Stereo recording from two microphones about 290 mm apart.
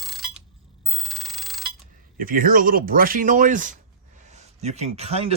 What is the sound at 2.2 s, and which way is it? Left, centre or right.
Speech, right.